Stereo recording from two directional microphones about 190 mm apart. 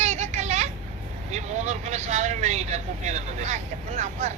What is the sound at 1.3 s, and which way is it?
Speech, 35° right (ahead or behind).